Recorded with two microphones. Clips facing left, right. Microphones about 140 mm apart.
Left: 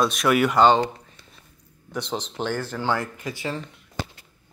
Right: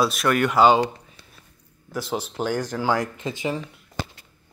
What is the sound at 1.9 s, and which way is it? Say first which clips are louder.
Speech: right 2 dB; 5° right (ahead or behind).